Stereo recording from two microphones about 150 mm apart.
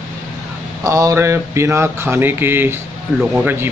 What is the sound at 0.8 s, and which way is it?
Speech, 20° right (ahead or behind).